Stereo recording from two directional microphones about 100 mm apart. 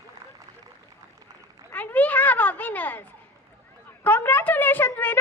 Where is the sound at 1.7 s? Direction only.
15° left (ahead or behind).